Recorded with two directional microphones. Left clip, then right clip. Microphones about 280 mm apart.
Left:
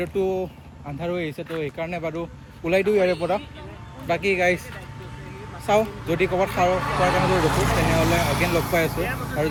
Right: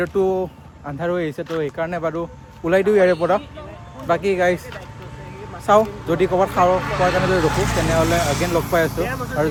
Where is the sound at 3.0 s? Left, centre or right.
Right.